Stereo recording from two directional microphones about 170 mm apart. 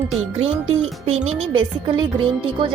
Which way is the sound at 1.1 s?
35° right (ahead or behind).